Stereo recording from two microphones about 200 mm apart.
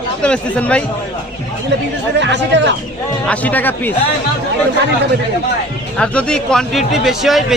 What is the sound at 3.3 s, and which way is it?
Speech, 10° left (ahead or behind).